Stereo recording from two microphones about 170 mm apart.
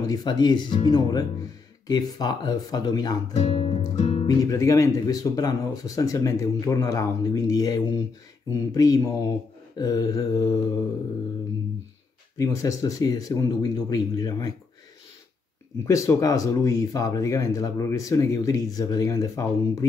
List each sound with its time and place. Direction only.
0.0 s speech: 25° left (ahead or behind)
3.3 s music: 40° left (ahead or behind)
4.4 s speech: 20° left (ahead or behind)
12.4 s speech: 20° left (ahead or behind)
15.8 s speech: 20° left (ahead or behind)